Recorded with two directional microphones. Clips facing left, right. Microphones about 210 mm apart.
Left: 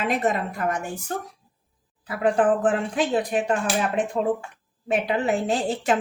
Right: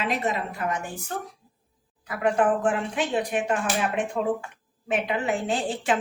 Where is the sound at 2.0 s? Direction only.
30° left (ahead or behind).